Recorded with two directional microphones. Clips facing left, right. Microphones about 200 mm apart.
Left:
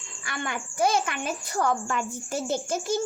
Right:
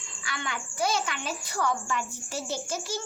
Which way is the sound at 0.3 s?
50° left (ahead or behind).